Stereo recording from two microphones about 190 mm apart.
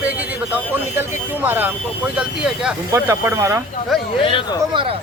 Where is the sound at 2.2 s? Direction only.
10° right (ahead or behind).